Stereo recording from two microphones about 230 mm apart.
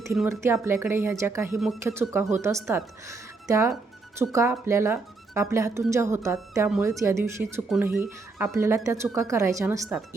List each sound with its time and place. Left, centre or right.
0.3 s a woman's voice: centre
4.2 s a woman's voice: centre